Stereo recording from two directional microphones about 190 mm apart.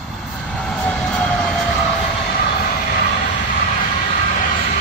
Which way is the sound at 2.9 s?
45° left (ahead or behind).